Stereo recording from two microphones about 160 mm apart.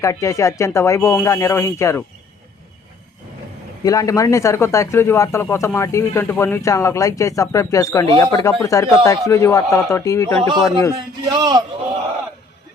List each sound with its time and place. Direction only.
0.0 s speech: 20° left (ahead or behind)
3.8 s speech: 20° left (ahead or behind)
11.3 s a man's voice: 25° right (ahead or behind)